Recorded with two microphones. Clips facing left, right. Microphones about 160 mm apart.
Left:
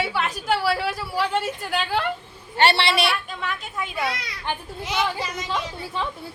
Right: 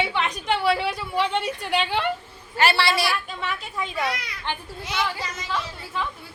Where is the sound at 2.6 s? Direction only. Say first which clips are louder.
Left 2 dB; 30° left (ahead or behind).